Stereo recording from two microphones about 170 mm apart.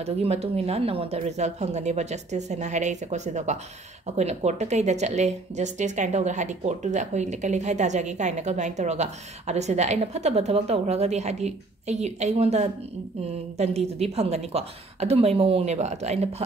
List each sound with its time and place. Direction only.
0.0 s a woman's voice: 35° right (ahead or behind)